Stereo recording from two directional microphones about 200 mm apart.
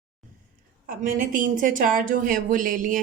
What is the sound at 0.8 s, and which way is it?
A woman's voice, 45° right (ahead or behind).